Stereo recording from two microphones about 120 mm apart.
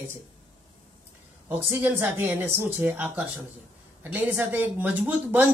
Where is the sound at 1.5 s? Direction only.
15° right (ahead or behind).